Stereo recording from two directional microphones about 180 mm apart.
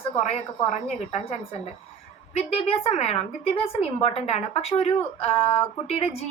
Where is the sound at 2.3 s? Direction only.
35° left (ahead or behind).